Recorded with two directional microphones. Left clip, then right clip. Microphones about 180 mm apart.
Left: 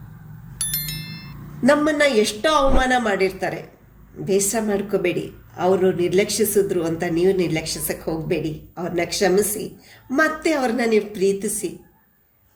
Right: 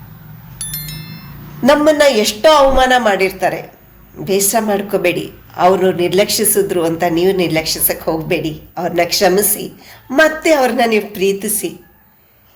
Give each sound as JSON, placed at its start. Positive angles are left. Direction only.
{"t": 0.6, "sound": "chime", "side_deg": 0}
{"t": 2.0, "sound": "a woman's voice", "side_deg": 15}